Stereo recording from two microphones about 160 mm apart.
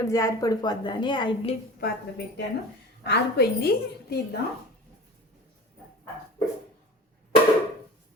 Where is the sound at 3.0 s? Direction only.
90° left.